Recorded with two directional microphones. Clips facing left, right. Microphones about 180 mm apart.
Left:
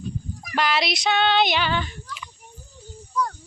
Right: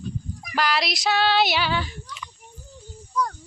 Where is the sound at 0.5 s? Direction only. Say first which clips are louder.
Left 1 dB; centre (ahead or behind).